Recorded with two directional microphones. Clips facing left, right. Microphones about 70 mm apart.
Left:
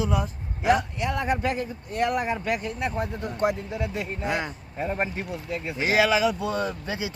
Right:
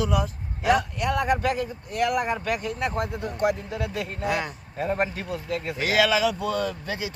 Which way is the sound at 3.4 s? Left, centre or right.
Left.